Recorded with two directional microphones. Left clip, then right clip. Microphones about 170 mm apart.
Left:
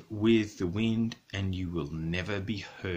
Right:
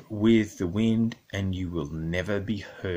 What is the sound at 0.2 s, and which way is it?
Speech, 30° right (ahead or behind).